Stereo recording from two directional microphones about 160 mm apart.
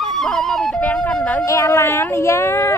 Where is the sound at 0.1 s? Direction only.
5° left (ahead or behind).